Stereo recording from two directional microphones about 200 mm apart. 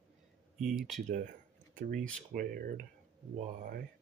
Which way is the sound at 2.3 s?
45° right (ahead or behind).